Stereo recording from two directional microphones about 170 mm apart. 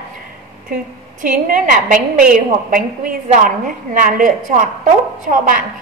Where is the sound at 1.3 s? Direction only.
55° right (ahead or behind).